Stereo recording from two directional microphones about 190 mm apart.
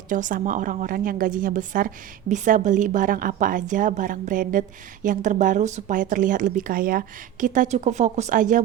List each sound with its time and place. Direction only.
0.1 s a woman's voice: 45° right (ahead or behind)